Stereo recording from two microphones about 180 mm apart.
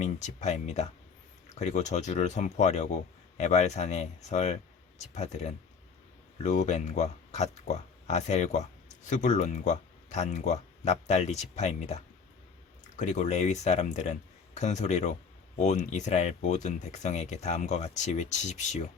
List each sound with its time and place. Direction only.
0.0 s speech: 40° left (ahead or behind)